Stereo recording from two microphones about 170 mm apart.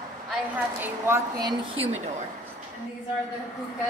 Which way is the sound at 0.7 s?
15° right (ahead or behind).